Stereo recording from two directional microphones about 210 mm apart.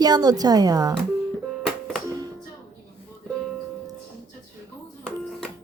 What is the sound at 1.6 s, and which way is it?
Music, centre (ahead or behind).